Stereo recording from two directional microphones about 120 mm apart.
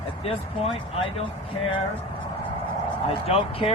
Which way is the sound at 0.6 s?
50° left (ahead or behind).